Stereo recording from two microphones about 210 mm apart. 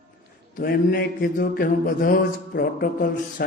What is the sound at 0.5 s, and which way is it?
A man's voice, 45° left (ahead or behind).